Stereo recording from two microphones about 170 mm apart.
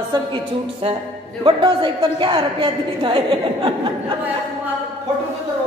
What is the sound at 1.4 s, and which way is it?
A woman's voice, 30° right (ahead or behind).